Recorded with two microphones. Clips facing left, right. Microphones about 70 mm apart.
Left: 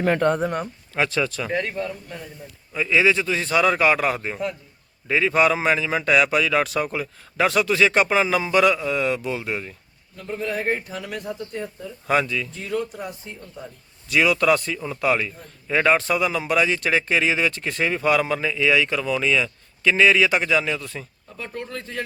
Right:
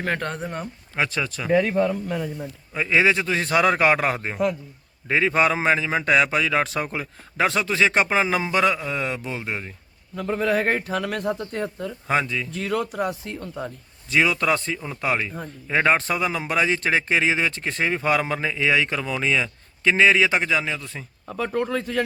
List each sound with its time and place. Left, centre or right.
0.9 s speech: centre
1.9 s speech: right
2.7 s a man's voice: right
10.2 s speech: right
12.0 s a man's voice: right
12.5 s speech: right
14.1 s a man's voice: right
21.2 s speech: right